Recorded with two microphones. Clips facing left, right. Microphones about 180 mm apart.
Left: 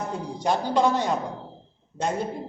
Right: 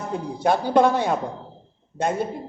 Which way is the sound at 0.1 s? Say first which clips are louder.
Right 5 dB; 55° right (ahead or behind).